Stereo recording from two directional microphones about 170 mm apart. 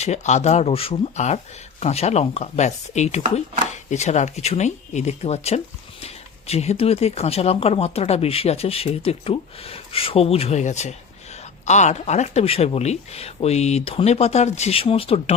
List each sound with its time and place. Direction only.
0.0 s speech: 40° left (ahead or behind)